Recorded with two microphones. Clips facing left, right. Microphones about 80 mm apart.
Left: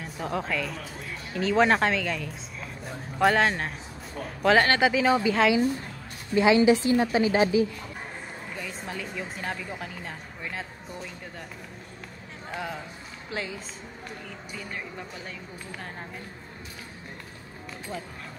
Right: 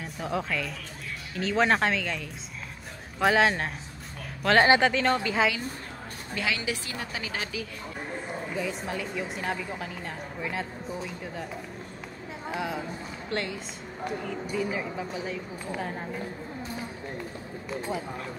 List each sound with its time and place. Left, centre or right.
0.0 s speech: centre
6.3 s a woman's voice: left
8.5 s speech: centre
12.4 s speech: centre